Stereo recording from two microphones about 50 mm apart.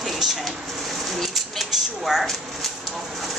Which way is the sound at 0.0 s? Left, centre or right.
Centre.